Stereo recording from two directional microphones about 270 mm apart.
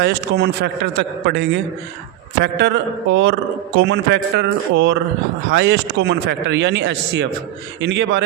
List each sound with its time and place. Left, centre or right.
0.0 s speech: right